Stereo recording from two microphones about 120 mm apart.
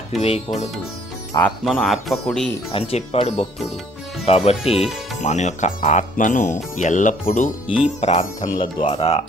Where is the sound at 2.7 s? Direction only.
55° left (ahead or behind).